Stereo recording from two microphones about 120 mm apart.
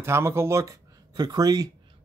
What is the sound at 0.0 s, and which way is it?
Speech, 20° right (ahead or behind).